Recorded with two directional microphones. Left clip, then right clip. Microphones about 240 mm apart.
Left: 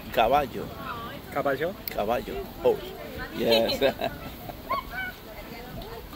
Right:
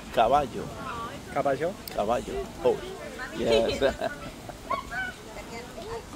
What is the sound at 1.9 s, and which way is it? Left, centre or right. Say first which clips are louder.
Speech: even; centre.